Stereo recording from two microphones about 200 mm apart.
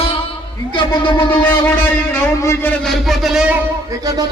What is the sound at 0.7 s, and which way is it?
Music, 25° left (ahead or behind).